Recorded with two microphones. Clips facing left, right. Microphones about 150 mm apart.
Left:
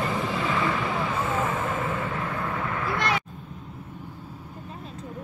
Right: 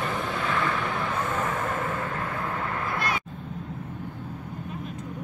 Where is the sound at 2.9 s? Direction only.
80° left.